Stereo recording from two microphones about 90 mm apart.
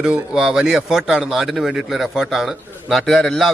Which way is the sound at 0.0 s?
10° right (ahead or behind).